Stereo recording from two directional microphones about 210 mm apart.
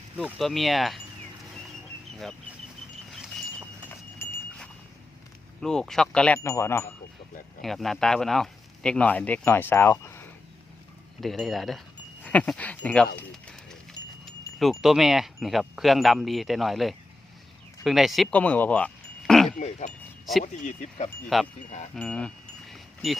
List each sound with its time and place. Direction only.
0.2 s speech: centre (ahead or behind)
3.8 s a sound: 5° left (ahead or behind)
5.5 s speech: 5° left (ahead or behind)
7.6 s speech: centre (ahead or behind)
11.2 s speech: centre (ahead or behind)
13.1 s a sound: 5° left (ahead or behind)
14.3 s speech: centre (ahead or behind)
19.5 s speech: 35° left (ahead or behind)
21.3 s speech: centre (ahead or behind)
22.7 s chime: centre (ahead or behind)